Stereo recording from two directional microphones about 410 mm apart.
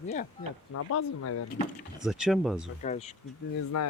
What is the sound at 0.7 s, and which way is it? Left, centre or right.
Speech, left.